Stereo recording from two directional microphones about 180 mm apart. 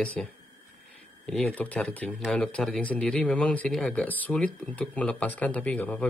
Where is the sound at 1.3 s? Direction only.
5° left (ahead or behind).